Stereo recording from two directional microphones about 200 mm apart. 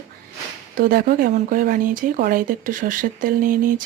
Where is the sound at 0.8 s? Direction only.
45° right (ahead or behind).